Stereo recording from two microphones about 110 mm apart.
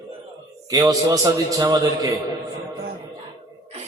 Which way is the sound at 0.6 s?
30° right (ahead or behind).